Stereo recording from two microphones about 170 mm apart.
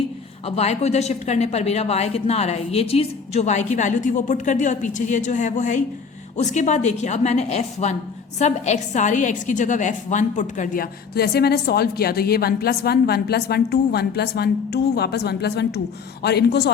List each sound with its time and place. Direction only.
0.4 s a woman's voice: 40° left (ahead or behind); by 16.7 s 75° left (ahead or behind)